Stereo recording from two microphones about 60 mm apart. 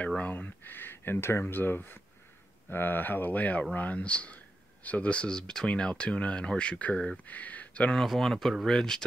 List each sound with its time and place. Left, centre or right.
0.2 s speech: left
0.7 s speech: left
7.9 s speech: centre